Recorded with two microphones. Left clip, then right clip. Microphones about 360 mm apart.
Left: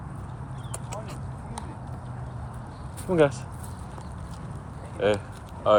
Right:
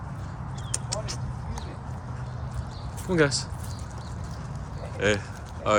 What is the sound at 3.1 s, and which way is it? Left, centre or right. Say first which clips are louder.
Speech: left 2 dB; centre.